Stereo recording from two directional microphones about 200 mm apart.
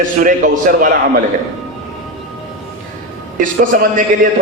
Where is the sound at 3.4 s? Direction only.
45° right (ahead or behind).